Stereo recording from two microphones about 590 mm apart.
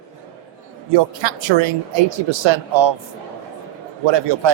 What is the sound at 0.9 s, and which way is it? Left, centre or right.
A woman's voice, right.